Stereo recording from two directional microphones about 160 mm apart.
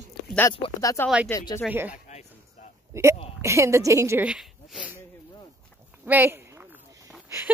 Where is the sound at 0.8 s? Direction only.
20° left (ahead or behind).